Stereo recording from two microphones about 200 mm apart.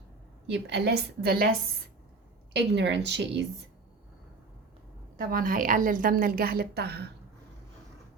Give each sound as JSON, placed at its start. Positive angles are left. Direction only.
{"t": 0.7, "sound": "a woman's voice", "side_deg": -55}
{"t": 2.5, "sound": "a woman's voice", "side_deg": -60}
{"t": 5.1, "sound": "a woman's voice", "side_deg": -45}